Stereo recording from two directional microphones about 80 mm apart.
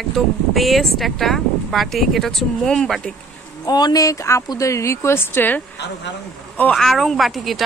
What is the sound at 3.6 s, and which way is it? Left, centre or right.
Speech, left.